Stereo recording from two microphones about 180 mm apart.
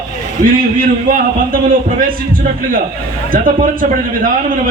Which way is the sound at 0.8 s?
50° right (ahead or behind).